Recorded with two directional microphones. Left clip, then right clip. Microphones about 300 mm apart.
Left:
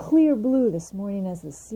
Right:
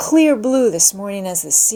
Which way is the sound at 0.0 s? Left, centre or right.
Centre.